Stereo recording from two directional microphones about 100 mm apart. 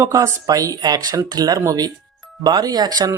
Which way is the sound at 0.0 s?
35° right (ahead or behind).